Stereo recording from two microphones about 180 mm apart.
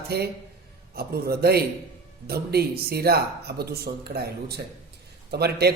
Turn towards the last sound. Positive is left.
turn(degrees=-65)  # may be behind; listen again after turning